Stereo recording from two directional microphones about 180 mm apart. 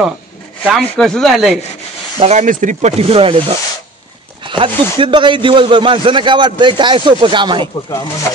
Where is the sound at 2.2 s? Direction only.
40° right (ahead or behind).